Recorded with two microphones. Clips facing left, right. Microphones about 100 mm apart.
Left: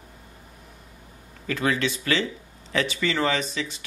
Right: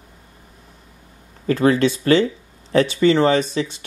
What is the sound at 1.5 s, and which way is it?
Speech, 35° right (ahead or behind).